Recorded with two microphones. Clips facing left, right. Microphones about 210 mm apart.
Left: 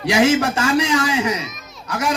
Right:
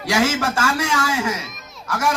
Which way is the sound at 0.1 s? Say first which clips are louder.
Left 4 dB; 20° left (ahead or behind).